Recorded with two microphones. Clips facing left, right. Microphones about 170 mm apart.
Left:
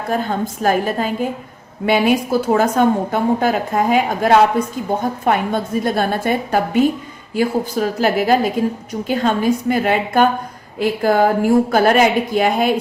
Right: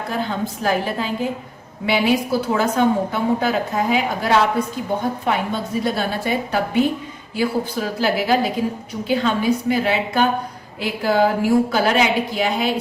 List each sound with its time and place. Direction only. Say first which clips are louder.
0.1 s a woman's voice: left 5 dB; 45° left (ahead or behind)